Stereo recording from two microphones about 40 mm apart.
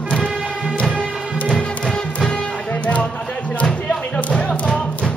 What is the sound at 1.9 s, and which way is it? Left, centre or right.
Music, centre.